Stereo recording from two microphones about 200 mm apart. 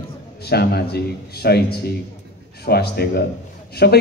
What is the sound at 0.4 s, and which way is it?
A man's voice, 55° left (ahead or behind).